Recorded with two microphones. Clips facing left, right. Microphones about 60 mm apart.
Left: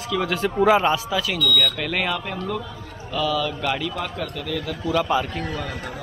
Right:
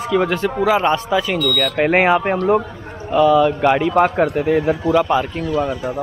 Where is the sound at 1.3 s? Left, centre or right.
Right.